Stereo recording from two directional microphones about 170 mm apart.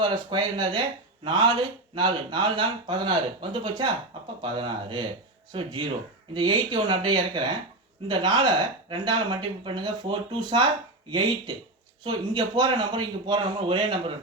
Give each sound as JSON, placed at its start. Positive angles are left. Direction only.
{"t": 0.0, "sound": "speech", "side_deg": -30}